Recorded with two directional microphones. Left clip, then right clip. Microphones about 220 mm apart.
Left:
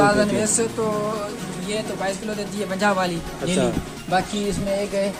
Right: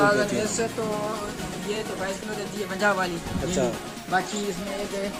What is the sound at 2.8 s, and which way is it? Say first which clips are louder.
Speech: left 3 dB; 55° left (ahead or behind).